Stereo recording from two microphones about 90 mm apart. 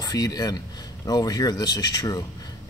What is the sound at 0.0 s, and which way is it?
Speech, 45° left (ahead or behind).